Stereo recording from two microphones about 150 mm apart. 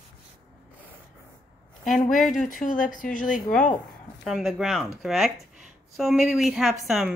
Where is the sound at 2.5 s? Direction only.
65° left (ahead or behind).